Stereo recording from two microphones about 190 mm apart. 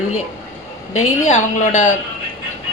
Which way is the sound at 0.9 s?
40° left (ahead or behind).